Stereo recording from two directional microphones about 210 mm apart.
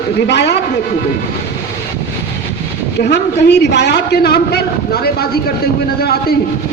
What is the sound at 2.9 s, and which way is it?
A man's voice, 50° left (ahead or behind).